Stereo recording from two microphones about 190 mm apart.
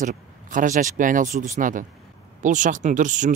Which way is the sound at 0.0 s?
45° right (ahead or behind).